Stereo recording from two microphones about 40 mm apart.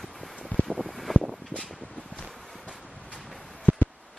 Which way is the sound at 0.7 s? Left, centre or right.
Centre.